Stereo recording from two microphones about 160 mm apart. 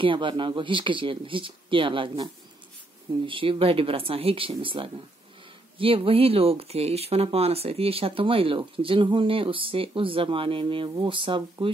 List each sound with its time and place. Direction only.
0.0 s speech: 30° right (ahead or behind)
3.3 s speech: 35° right (ahead or behind)